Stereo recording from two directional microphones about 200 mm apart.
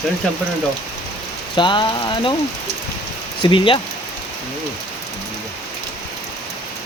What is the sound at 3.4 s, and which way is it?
Speech, 25° left (ahead or behind).